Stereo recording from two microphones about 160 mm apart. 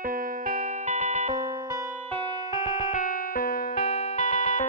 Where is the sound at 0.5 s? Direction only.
45° right (ahead or behind).